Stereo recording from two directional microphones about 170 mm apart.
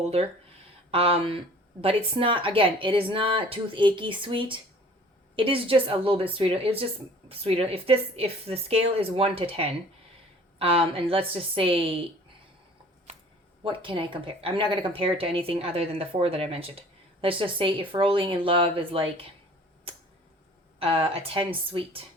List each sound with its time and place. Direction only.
0.9 s speech: 35° right (ahead or behind)
13.7 s speech: 30° right (ahead or behind)
20.7 s speech: 35° right (ahead or behind)